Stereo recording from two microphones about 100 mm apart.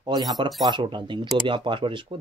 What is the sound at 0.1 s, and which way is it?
Speech, 50° right (ahead or behind).